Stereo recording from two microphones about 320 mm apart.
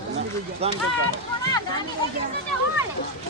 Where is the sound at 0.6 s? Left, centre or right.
Centre.